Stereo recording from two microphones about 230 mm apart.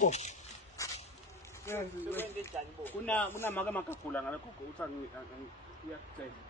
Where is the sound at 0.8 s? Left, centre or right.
Centre.